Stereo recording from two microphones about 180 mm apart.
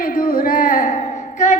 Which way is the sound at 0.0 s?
50° left (ahead or behind).